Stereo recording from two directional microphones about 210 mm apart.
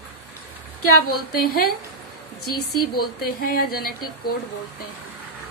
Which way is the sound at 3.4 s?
45° left (ahead or behind).